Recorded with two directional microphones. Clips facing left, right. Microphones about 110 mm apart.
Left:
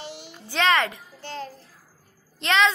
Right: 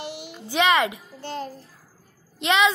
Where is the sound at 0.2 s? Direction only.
10° right (ahead or behind).